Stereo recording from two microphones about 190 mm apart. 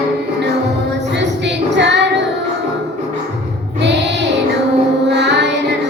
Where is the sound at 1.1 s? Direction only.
65° right (ahead or behind).